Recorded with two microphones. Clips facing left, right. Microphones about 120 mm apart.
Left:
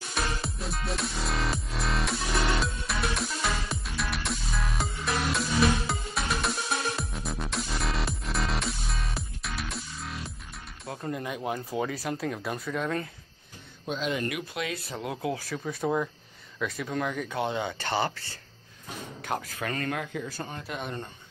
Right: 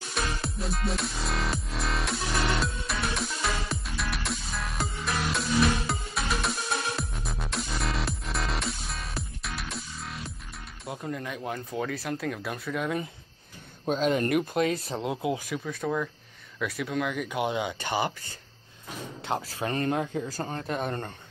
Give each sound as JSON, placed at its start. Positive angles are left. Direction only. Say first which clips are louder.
{"t": 0.1, "sound": "music", "louder": "even", "side_deg": 0}
{"t": 11.0, "sound": "speech", "louder": "left 2 dB", "side_deg": 10}
{"t": 13.8, "sound": "speech", "louder": "right 5 dB", "side_deg": -40}
{"t": 15.0, "sound": "speech", "louder": "right 2 dB", "side_deg": -20}
{"t": 15.6, "sound": "speech", "louder": "left 5 dB", "side_deg": 10}
{"t": 16.5, "sound": "speech", "louder": "right 1 dB", "side_deg": -5}
{"t": 19.2, "sound": "speech", "louder": "right 2 dB", "side_deg": -30}